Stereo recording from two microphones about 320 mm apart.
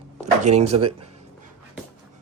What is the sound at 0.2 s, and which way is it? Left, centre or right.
Speech, right.